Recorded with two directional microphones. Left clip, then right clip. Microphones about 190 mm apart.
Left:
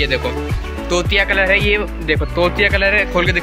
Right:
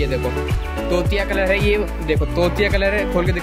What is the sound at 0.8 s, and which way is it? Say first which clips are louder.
Speech: left 4 dB; 5° left (ahead or behind).